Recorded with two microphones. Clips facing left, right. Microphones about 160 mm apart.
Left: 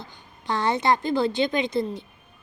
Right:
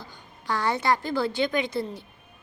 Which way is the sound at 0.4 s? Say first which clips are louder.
Left 2 dB; 20° left (ahead or behind).